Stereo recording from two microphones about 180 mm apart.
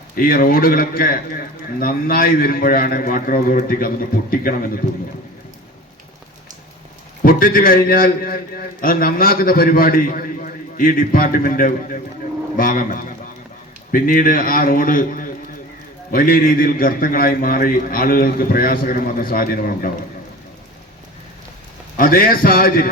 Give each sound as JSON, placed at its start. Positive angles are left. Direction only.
{"t": 0.2, "sound": "a man's voice", "side_deg": 50}
{"t": 7.2, "sound": "a man's voice", "side_deg": 50}
{"t": 21.9, "sound": "a man's voice", "side_deg": 50}